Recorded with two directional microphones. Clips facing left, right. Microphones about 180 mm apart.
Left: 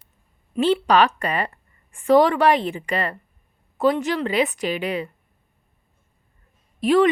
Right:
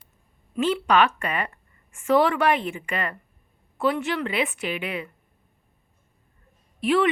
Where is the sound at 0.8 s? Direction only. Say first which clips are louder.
Left 3 dB; 35° left (ahead or behind).